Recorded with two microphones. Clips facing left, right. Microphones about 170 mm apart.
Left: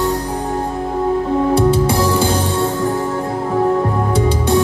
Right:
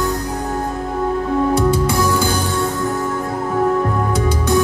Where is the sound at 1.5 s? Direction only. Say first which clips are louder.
Left 2 dB; 30° left (ahead or behind).